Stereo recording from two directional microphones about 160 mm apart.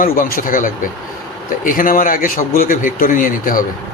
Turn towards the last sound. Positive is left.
turn(degrees=60)  # may be behind; listen again after turning